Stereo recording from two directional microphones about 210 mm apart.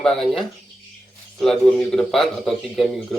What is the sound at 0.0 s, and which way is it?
Speech, centre (ahead or behind).